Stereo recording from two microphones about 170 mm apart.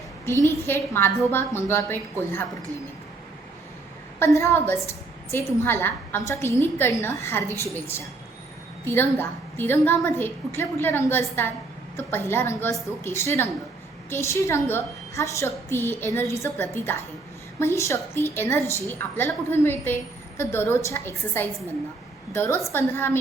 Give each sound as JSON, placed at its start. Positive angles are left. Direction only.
{"t": 0.4, "sound": "a woman's voice", "side_deg": 15}
{"t": 4.2, "sound": "a woman's voice", "side_deg": 15}